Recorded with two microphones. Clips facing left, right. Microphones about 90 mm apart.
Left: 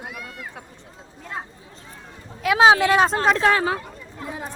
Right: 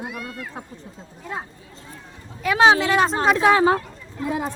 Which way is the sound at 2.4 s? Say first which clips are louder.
Left 1 dB; 5° left (ahead or behind).